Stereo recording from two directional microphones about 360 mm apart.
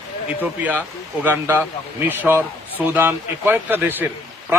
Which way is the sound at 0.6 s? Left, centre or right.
Centre.